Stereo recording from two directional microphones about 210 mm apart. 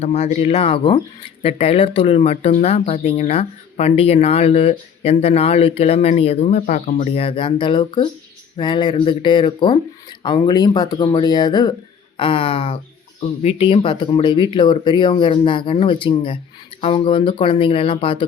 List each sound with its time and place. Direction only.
0.0 s speech: 30° left (ahead or behind)